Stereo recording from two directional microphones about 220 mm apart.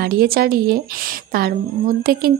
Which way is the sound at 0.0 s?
45° right (ahead or behind).